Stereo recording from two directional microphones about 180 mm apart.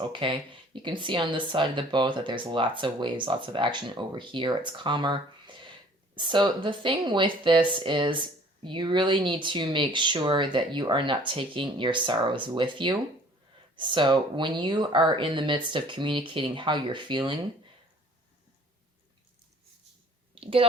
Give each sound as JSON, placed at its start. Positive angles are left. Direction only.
{"t": 0.1, "sound": "speech", "side_deg": -30}
{"t": 20.3, "sound": "clicking", "side_deg": -30}